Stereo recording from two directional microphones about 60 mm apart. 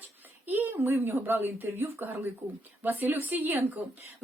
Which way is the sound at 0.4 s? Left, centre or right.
Right.